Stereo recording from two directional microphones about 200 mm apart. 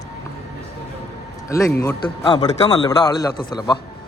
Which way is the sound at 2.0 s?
25° left (ahead or behind).